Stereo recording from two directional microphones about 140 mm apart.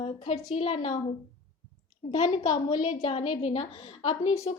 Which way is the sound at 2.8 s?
40° left (ahead or behind).